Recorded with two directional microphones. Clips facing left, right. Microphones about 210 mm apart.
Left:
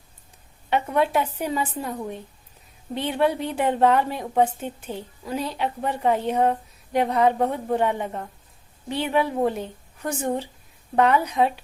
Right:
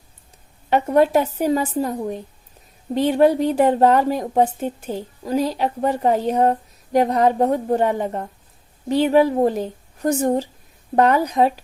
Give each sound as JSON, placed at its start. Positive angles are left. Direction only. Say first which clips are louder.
{"t": 0.7, "sound": "a woman's voice", "louder": "right 6 dB", "side_deg": -40}